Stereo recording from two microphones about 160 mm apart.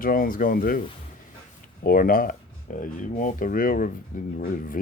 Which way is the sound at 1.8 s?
65° left (ahead or behind).